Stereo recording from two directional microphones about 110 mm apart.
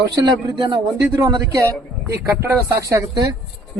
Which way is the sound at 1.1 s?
30° right (ahead or behind).